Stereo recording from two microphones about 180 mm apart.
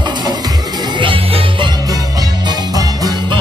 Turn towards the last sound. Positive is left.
turn(degrees=-20)  # may be behind; listen again after turning